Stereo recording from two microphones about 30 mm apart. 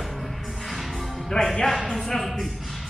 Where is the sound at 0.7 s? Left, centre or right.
Centre.